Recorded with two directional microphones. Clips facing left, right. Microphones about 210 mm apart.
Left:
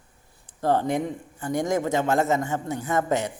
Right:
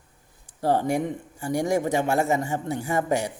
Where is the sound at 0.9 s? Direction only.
10° right (ahead or behind).